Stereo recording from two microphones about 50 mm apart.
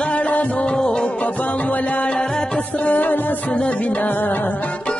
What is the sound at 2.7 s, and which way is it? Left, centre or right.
Music, left.